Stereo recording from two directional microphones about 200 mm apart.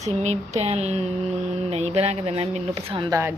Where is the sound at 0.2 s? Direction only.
35° right (ahead or behind).